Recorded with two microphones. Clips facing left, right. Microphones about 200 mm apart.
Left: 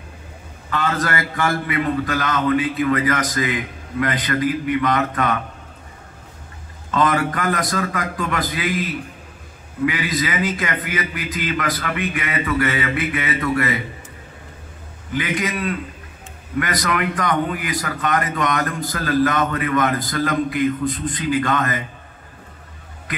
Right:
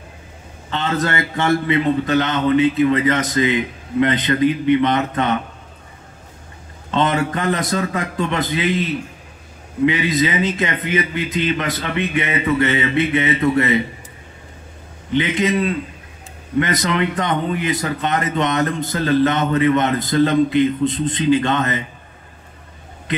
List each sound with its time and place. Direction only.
0.7 s a man's voice: 25° right (ahead or behind)
6.9 s a man's voice: 25° right (ahead or behind)
15.0 s a man's voice: 25° right (ahead or behind)